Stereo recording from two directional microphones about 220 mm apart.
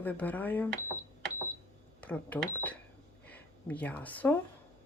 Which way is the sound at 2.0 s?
5° left (ahead or behind).